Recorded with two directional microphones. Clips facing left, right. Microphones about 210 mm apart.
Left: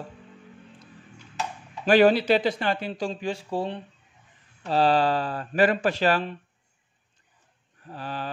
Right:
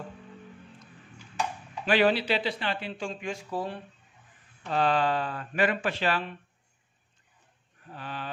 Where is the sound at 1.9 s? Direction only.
45° left (ahead or behind).